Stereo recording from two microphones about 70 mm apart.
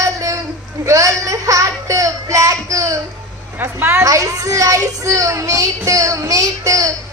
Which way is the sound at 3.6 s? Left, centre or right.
Right.